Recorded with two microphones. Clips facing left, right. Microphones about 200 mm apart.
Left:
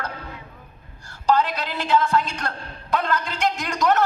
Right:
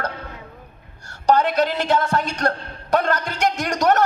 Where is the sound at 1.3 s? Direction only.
45° right (ahead or behind).